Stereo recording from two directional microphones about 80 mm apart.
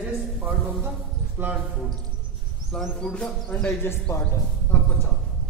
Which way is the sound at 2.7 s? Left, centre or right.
Centre.